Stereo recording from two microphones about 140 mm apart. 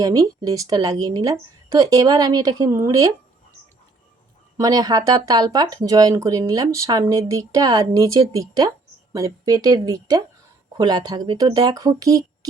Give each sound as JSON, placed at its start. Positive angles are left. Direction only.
{"t": 0.0, "sound": "speech", "side_deg": -25}
{"t": 4.6, "sound": "speech", "side_deg": -25}